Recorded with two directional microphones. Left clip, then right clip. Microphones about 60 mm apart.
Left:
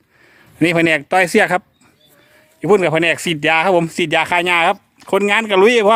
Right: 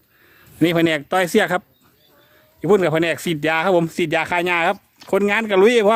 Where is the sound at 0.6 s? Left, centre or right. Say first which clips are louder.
Left 3 dB; left.